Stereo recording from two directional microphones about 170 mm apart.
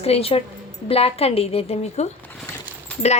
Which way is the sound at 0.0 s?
35° left (ahead or behind).